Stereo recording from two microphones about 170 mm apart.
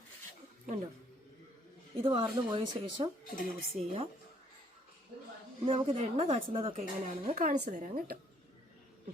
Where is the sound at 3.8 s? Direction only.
Centre (ahead or behind).